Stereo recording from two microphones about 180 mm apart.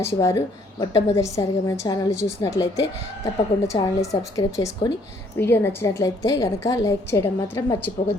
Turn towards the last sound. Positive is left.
turn(degrees=10)  # may be behind; listen again after turning